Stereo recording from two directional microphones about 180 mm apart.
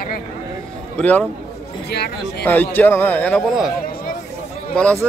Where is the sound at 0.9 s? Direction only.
10° left (ahead or behind).